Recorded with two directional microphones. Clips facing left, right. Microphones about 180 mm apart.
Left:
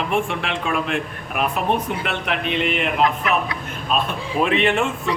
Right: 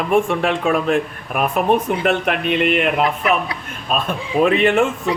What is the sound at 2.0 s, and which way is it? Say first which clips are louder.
Speech: right 6 dB; 50° right (ahead or behind).